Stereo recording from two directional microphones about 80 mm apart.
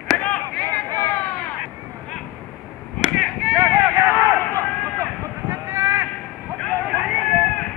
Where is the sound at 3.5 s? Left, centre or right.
Right.